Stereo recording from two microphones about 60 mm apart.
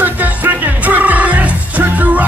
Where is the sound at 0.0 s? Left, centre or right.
Right.